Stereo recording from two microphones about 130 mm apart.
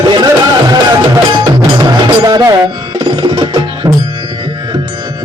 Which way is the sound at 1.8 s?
30° right (ahead or behind).